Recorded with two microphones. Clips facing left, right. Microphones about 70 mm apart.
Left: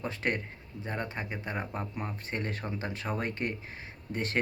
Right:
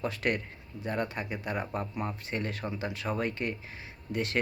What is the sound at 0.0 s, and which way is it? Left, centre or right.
Speech, left.